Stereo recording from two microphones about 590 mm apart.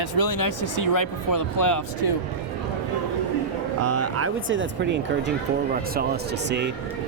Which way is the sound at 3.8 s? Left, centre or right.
Right.